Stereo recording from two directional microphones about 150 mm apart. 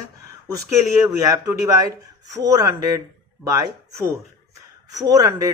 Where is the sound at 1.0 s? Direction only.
20° right (ahead or behind).